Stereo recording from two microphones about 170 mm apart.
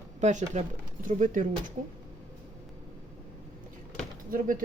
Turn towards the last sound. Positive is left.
turn(degrees=-55)  # may be behind; listen again after turning